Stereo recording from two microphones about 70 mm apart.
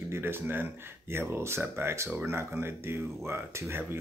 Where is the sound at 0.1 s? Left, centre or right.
Right.